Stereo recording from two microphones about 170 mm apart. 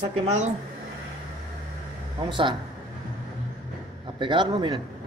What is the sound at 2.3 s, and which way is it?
Speech, 30° right (ahead or behind).